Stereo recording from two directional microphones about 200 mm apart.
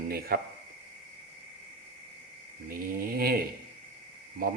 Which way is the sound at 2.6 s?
45° right (ahead or behind).